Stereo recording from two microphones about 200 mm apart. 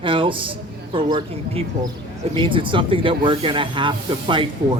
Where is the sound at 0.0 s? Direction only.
25° right (ahead or behind).